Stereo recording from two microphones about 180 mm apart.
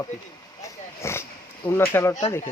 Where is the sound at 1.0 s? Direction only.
15° left (ahead or behind).